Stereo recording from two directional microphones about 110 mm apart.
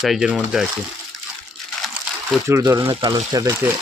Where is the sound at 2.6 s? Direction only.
30° right (ahead or behind).